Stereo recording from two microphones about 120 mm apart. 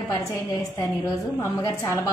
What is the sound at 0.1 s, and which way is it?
A woman's voice, 30° left (ahead or behind).